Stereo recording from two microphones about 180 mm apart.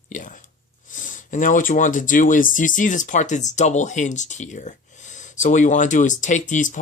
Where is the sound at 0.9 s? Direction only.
45° left (ahead or behind).